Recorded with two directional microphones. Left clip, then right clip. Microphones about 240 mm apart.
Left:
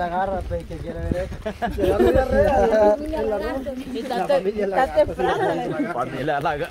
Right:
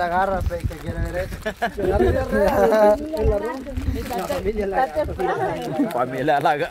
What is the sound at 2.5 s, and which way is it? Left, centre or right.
Speech, right.